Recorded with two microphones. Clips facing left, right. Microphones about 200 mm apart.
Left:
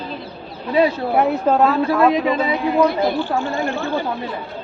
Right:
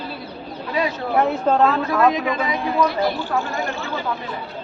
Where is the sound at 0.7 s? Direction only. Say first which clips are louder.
Left 7 dB; 30° left (ahead or behind).